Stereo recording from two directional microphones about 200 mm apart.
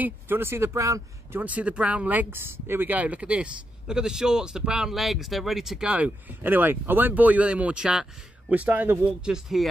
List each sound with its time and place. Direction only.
0.0 s speech: 10° right (ahead or behind)